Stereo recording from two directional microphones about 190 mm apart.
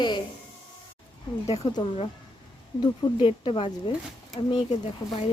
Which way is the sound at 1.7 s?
25° left (ahead or behind).